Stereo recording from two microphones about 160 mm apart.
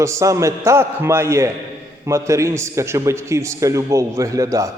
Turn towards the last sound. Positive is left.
turn(degrees=-20)  # may be behind; listen again after turning